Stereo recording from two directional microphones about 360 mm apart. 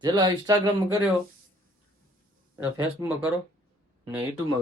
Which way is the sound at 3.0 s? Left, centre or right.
Centre.